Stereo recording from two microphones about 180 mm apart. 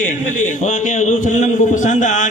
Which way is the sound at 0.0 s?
45° left (ahead or behind).